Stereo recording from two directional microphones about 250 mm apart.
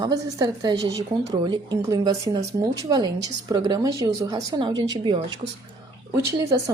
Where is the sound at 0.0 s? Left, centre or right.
Centre.